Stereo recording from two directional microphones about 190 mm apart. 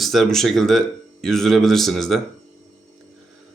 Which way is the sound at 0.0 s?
Centre (ahead or behind).